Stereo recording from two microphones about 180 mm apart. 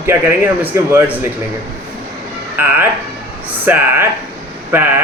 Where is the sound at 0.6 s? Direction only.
15° right (ahead or behind).